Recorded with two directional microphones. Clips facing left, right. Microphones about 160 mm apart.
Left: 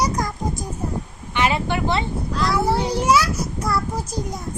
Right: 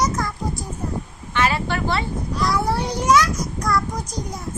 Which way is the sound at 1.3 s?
15° left (ahead or behind).